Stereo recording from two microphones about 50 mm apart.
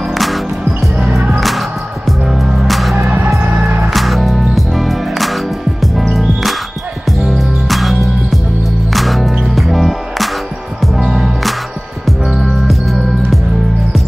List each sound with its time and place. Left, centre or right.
0.1 s music: centre
1.4 s music: centre
3.0 s music: right
3.9 s music: centre
7.1 s music: centre